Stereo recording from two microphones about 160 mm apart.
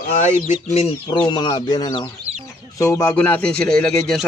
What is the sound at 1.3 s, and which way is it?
Speech, 30° left (ahead or behind).